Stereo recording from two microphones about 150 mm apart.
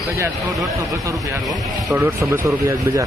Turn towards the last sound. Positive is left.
turn(degrees=-20)  # may be behind; listen again after turning